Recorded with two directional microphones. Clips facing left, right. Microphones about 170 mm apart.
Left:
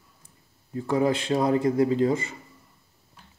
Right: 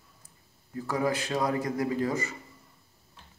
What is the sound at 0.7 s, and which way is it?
A man's voice, 25° left (ahead or behind).